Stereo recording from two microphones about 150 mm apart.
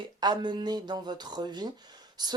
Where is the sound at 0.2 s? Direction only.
30° right (ahead or behind).